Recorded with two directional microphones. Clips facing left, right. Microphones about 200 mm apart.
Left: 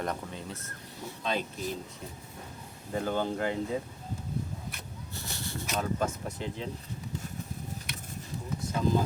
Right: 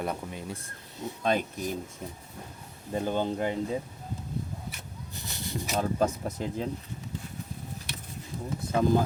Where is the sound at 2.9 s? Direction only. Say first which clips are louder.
Right 2 dB; 20° right (ahead or behind).